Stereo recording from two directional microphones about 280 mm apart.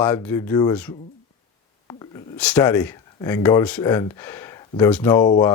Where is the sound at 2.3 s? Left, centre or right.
Centre.